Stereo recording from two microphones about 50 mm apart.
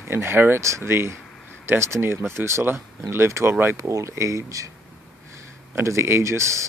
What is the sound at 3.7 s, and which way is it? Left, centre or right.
Speech, right.